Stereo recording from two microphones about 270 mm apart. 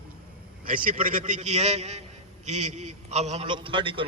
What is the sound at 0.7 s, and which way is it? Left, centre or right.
A man's voice, right.